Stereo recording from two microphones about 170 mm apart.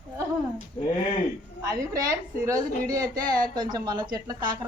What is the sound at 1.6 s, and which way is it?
A woman's voice, 20° right (ahead or behind).